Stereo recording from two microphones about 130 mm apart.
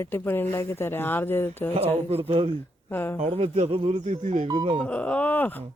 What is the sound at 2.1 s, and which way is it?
Speech, 50° right (ahead or behind).